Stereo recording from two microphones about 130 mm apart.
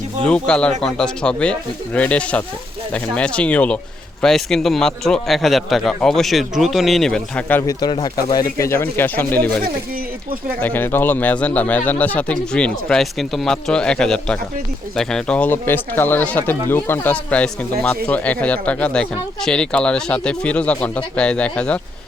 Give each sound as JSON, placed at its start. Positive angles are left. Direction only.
{"t": 0.3, "sound": "a man's voice", "side_deg": 5}
{"t": 7.7, "sound": "speech", "side_deg": 35}
{"t": 10.6, "sound": "speech", "side_deg": 15}